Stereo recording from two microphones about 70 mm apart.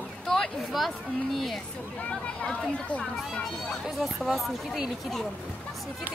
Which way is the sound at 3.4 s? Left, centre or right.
Centre.